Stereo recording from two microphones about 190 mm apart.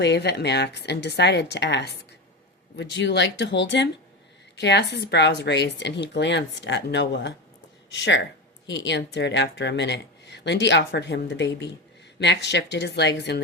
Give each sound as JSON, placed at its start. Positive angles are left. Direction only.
{"t": 0.0, "sound": "a woman's voice", "side_deg": 60}